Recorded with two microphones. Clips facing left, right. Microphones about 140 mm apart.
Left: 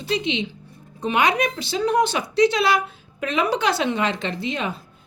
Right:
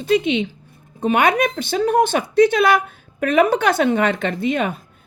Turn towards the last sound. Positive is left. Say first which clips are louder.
# right 6 dB
turn(degrees=-50)  # may be behind; listen again after turning